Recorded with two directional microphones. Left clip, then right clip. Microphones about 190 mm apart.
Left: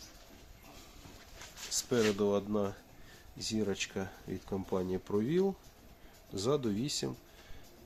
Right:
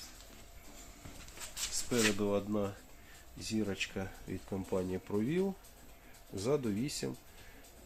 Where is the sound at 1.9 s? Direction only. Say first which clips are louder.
Left 2 dB; 35° left (ahead or behind).